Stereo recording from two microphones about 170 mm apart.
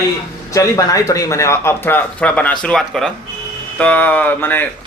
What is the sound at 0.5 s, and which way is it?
Speech, 20° left (ahead or behind).